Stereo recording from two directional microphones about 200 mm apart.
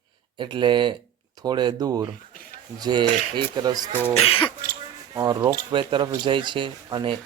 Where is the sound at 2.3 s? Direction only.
45° left (ahead or behind).